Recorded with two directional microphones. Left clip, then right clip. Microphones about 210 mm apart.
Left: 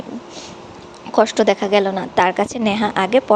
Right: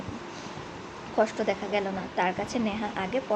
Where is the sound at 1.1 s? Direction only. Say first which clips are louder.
Left 12 dB; 35° left (ahead or behind).